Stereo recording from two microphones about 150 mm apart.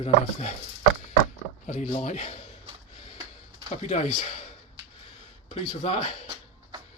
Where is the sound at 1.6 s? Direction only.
50° left (ahead or behind).